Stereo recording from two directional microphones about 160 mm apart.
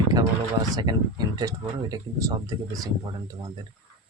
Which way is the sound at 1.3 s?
25° right (ahead or behind).